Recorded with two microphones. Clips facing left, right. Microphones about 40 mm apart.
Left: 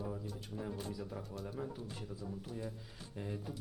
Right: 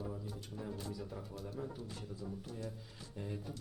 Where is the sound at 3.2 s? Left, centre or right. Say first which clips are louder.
Left 1 dB; centre.